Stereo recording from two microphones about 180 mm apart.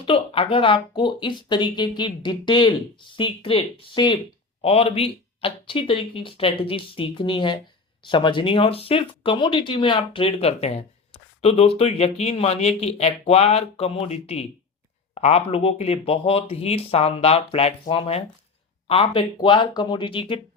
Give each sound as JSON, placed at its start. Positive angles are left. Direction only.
{"t": 0.0, "sound": "speech", "side_deg": 30}